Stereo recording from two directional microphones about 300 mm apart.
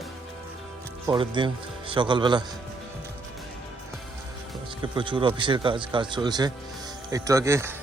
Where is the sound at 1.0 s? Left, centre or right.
Centre.